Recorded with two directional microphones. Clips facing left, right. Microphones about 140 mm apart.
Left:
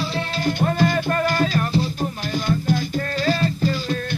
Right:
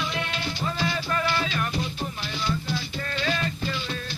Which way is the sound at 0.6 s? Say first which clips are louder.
Left 9 dB; 50° left (ahead or behind).